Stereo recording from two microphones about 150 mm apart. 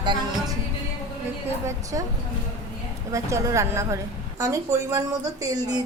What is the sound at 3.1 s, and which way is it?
A woman's voice, 20° right (ahead or behind).